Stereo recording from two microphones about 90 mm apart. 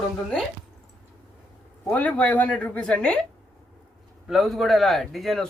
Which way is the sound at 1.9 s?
15° left (ahead or behind).